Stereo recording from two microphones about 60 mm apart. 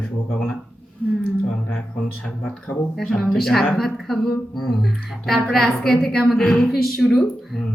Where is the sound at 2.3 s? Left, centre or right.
Left.